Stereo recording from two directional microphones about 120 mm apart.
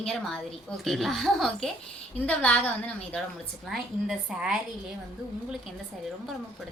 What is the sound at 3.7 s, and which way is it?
Speech, centre (ahead or behind).